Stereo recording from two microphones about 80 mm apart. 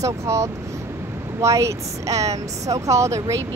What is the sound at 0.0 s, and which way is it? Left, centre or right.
Speech, right.